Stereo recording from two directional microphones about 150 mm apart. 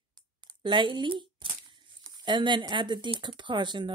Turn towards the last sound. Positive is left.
turn(degrees=-30)  # may be behind; listen again after turning